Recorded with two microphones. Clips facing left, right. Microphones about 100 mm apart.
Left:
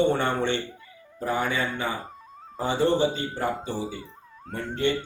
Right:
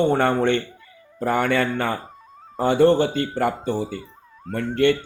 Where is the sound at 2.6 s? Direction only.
60° right (ahead or behind).